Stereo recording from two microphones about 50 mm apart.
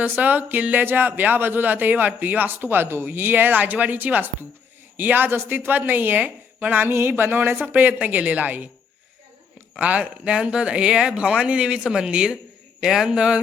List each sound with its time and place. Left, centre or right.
0.0 s a man's voice: right
6.8 s speech: right
7.7 s a man's voice: right
9.7 s speech: right